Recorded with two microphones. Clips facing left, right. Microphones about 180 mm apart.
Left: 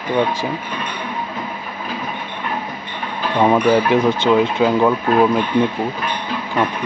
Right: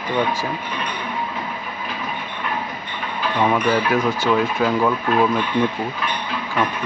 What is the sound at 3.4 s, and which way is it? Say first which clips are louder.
Speech: left 5 dB; 30° left (ahead or behind).